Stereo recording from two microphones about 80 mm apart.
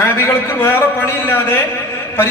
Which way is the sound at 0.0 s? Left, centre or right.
Left.